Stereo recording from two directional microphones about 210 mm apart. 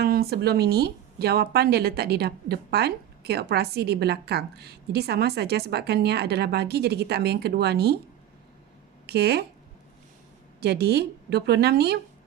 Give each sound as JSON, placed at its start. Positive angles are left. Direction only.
{"t": 0.0, "sound": "speech", "side_deg": -45}
{"t": 9.0, "sound": "speech", "side_deg": -50}
{"t": 10.6, "sound": "speech", "side_deg": -50}